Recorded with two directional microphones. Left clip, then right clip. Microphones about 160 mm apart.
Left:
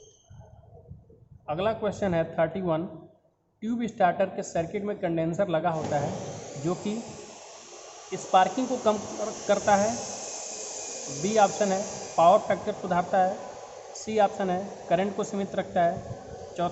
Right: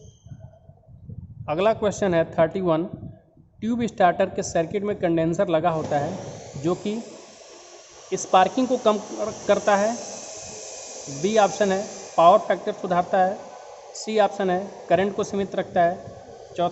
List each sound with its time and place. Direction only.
1.5 s a man's voice: 65° right (ahead or behind); by 6.8 s 45° right (ahead or behind)
8.1 s speech: 55° right (ahead or behind)
11.2 s speech: 45° right (ahead or behind)